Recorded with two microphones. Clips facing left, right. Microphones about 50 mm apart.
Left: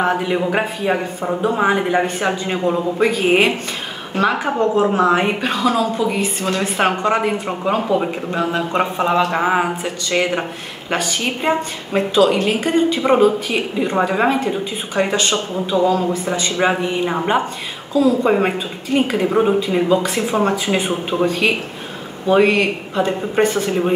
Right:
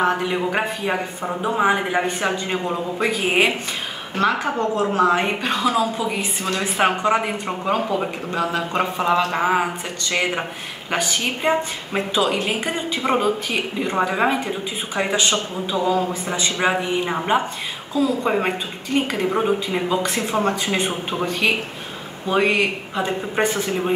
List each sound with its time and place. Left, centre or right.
0.2 s a woman's voice: centre
4.6 s a woman's voice: left; by 7.8 s centre
8.3 s a woman's voice: centre
10.9 s speech: centre
12.4 s a woman's voice: centre
13.0 s a woman's voice: centre